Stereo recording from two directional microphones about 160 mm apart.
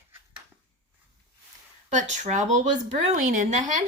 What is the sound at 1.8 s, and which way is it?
Speech, 50° right (ahead or behind).